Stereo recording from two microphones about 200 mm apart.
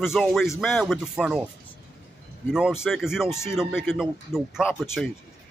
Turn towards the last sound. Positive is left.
turn(degrees=0)  # may be behind; listen again after turning